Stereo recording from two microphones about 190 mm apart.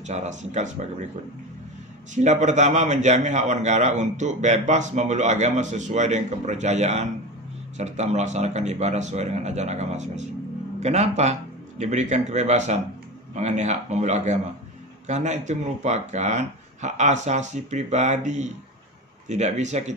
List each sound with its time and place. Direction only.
0.0 s a man's voice: 40° right (ahead or behind)
2.1 s a man's voice: 40° right (ahead or behind)